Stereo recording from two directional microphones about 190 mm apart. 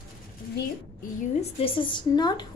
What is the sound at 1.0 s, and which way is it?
A woman's voice, 30° left (ahead or behind).